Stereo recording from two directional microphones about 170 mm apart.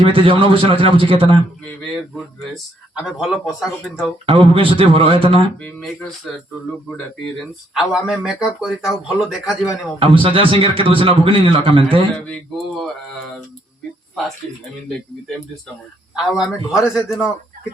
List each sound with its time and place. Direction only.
0.0 s a man's voice: 30° right (ahead or behind)
1.8 s speech: centre (ahead or behind)
4.3 s a man's voice: 30° right (ahead or behind)
5.6 s speech: centre (ahead or behind)
10.0 s a man's voice: 30° right (ahead or behind)
12.1 s speech: 5° left (ahead or behind)
16.1 s speech: 5° right (ahead or behind)